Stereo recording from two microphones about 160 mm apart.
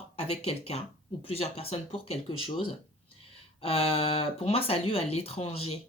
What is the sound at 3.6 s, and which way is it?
Speech, 35° left (ahead or behind).